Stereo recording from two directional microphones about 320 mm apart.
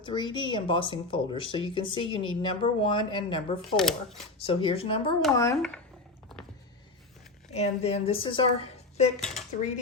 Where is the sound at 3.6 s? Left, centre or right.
Centre.